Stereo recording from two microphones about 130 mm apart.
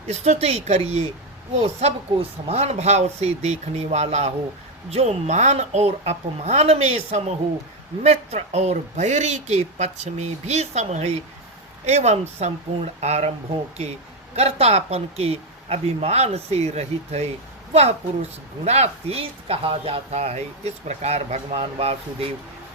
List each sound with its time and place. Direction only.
0.1 s speech: 60° right (ahead or behind)
14.3 s a woman's voice: 55° right (ahead or behind)